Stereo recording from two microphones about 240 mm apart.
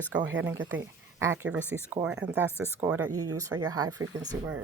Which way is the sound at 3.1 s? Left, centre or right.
Right.